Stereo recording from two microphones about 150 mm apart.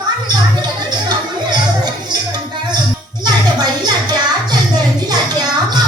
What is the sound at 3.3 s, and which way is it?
Music, 30° right (ahead or behind).